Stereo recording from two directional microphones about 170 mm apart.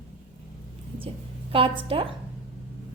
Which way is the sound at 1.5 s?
35° right (ahead or behind).